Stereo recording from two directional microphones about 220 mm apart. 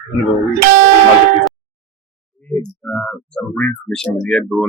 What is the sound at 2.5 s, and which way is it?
Speech, 5° left (ahead or behind).